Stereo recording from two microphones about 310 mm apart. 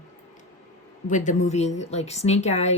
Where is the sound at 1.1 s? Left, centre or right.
Left.